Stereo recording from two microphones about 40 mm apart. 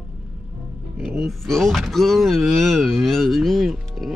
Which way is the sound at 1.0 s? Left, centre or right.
Centre.